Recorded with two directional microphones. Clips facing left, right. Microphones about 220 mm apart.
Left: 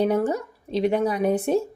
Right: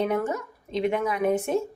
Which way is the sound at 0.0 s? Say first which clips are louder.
Left 4 dB; 35° left (ahead or behind).